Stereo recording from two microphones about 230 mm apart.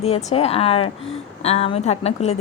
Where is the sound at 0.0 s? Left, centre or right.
Left.